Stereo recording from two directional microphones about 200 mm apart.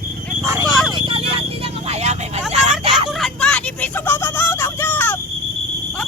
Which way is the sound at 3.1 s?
Centre (ahead or behind).